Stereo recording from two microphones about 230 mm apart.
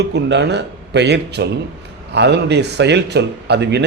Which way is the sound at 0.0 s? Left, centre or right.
Right.